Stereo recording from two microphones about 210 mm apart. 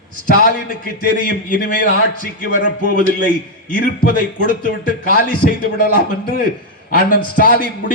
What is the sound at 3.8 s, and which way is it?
A man's voice, 40° left (ahead or behind).